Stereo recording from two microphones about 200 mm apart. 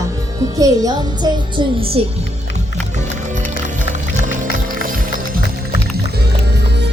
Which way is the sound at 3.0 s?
35° right (ahead or behind).